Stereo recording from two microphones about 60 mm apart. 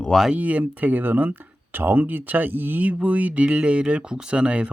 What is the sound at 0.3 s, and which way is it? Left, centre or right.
Speech, right.